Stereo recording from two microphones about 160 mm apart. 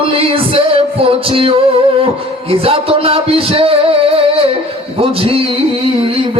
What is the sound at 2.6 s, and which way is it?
Music, 35° right (ahead or behind).